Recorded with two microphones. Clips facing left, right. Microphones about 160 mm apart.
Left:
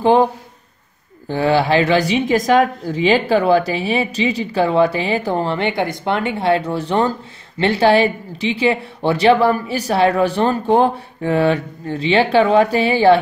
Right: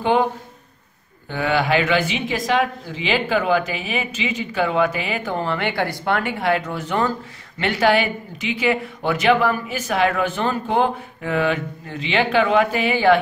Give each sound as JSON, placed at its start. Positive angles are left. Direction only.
{"t": 0.0, "sound": "speech", "side_deg": 35}
{"t": 1.3, "sound": "speech", "side_deg": 30}